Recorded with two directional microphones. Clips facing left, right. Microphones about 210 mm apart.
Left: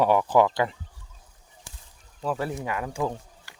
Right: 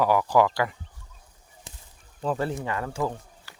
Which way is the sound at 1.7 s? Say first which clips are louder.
Right 2 dB; 20° right (ahead or behind).